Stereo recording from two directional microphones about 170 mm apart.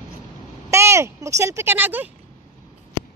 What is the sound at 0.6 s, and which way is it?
Speech, 15° right (ahead or behind).